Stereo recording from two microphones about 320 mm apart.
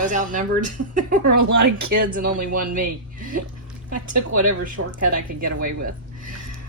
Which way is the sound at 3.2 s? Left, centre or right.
Right.